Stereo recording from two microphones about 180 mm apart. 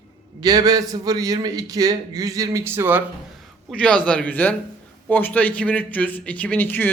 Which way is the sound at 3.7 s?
5° left (ahead or behind).